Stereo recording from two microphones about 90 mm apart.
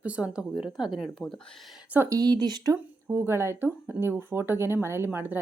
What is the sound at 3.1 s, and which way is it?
Speech, 30° right (ahead or behind).